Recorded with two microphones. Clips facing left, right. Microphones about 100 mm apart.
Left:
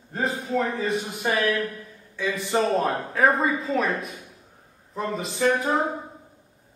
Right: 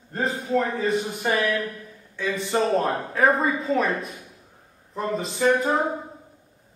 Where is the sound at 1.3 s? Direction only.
15° right (ahead or behind).